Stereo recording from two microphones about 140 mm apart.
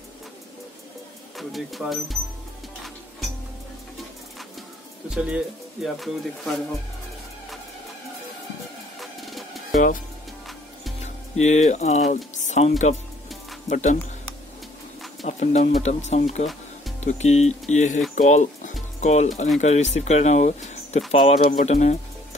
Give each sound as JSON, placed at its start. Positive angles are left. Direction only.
{"t": 1.3, "sound": "speech", "side_deg": 0}
{"t": 5.1, "sound": "speech", "side_deg": -5}
{"t": 9.0, "sound": "music", "side_deg": 0}
{"t": 11.3, "sound": "speech", "side_deg": 55}
{"t": 15.2, "sound": "speech", "side_deg": 55}
{"t": 18.1, "sound": "music", "side_deg": 60}
{"t": 19.6, "sound": "speech", "side_deg": 55}